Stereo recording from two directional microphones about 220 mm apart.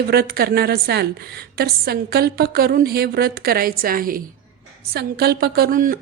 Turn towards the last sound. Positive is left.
turn(degrees=-40)  # may be behind; listen again after turning